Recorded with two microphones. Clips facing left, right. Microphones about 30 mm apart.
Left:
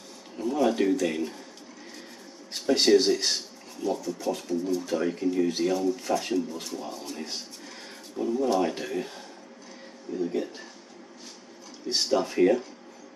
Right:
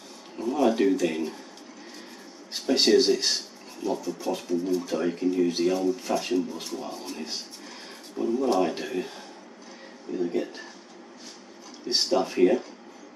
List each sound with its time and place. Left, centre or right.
0.4 s speech: centre
2.5 s speech: centre
10.1 s speech: right
11.9 s speech: centre